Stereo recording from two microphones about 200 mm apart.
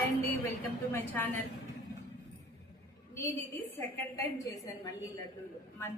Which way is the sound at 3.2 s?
10° left (ahead or behind).